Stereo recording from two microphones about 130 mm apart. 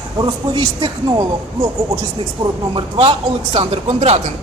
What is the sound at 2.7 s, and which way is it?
Speech, 40° right (ahead or behind).